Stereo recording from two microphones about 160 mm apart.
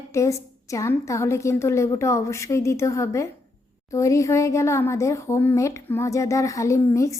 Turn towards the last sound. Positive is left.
turn(degrees=20)  # may be behind; listen again after turning